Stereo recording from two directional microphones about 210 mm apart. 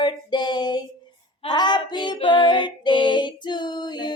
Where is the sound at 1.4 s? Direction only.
20° left (ahead or behind).